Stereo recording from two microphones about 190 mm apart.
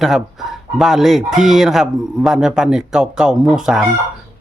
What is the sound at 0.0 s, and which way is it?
Speech, centre (ahead or behind).